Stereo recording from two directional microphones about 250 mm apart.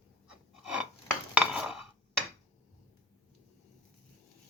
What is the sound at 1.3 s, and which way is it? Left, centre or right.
Dishes, centre.